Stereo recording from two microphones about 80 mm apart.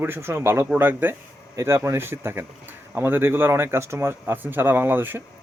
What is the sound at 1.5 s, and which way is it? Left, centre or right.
Speech, right.